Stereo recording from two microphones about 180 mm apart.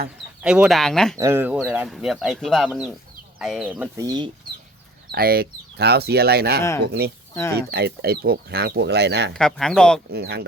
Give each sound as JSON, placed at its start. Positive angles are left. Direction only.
{"t": 0.4, "sound": "speech", "side_deg": -5}
{"t": 1.2, "sound": "speech", "side_deg": -15}
{"t": 4.0, "sound": "speech", "side_deg": -25}
{"t": 5.1, "sound": "speech", "side_deg": -55}
{"t": 6.6, "sound": "speech", "side_deg": 15}
{"t": 6.8, "sound": "speech", "side_deg": -60}
{"t": 7.3, "sound": "speech", "side_deg": 15}
{"t": 7.7, "sound": "speech", "side_deg": -65}
{"t": 9.3, "sound": "speech", "side_deg": 5}
{"t": 10.1, "sound": "speech", "side_deg": -65}